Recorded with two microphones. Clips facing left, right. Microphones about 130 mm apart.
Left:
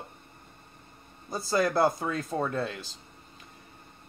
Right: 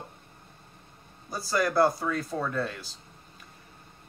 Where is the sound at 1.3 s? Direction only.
25° left (ahead or behind).